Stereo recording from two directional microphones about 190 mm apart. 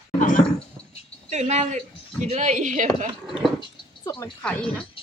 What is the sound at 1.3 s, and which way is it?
Speech, 35° right (ahead or behind).